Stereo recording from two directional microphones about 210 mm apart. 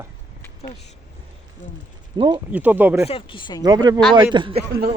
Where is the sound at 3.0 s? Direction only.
25° left (ahead or behind).